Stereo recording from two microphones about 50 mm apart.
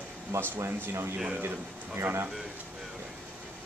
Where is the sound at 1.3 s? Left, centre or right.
Right.